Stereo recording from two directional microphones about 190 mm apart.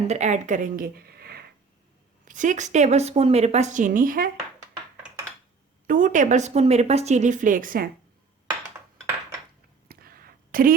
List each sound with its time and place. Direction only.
0.1 s speech: 40° right (ahead or behind); by 1.5 s 55° right (ahead or behind)
2.2 s speech: 40° right (ahead or behind)
5.9 s speech: 45° right (ahead or behind)
9.9 s a sound: 50° right (ahead or behind)